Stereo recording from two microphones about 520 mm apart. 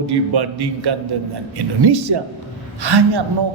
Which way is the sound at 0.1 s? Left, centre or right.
Right.